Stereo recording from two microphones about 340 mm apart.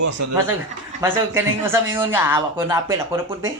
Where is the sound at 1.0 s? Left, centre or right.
Centre.